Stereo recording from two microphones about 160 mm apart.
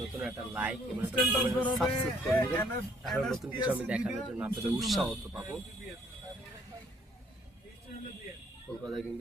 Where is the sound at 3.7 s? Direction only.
10° right (ahead or behind).